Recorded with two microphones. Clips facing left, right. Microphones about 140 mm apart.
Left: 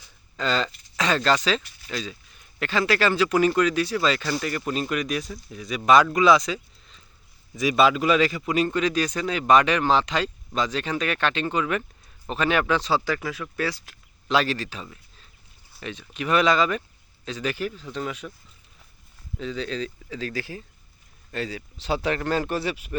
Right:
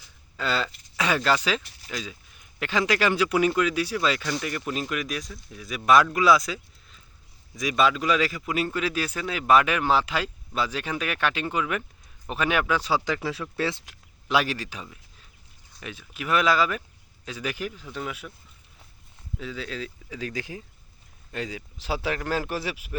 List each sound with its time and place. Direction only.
0.3 s speech: 10° right (ahead or behind)
13.1 s speech: 30° right (ahead or behind)
14.3 s speech: 10° right (ahead or behind)
19.4 s speech: 5° right (ahead or behind)